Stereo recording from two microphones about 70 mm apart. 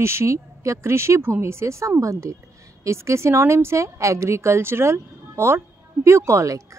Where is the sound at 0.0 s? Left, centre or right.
Right.